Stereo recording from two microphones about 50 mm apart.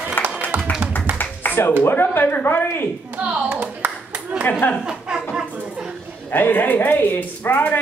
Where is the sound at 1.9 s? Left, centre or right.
Left.